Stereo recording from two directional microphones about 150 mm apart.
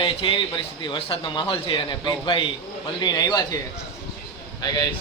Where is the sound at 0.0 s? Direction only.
35° left (ahead or behind).